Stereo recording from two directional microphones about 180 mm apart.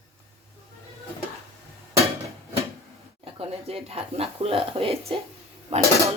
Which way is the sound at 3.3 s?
35° right (ahead or behind).